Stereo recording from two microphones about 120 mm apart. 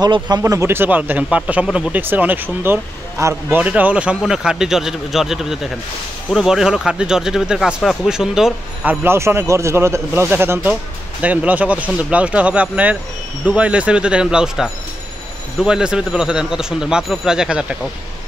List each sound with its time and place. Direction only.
0.0 s speech: 35° right (ahead or behind); by 8.9 s 5° right (ahead or behind)
9.0 s speech: 20° right (ahead or behind)